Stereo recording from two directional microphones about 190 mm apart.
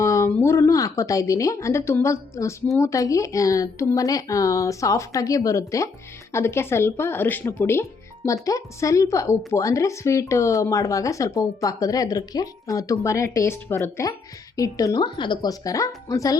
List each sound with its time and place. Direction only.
0.0 s a woman's voice: 15° left (ahead or behind)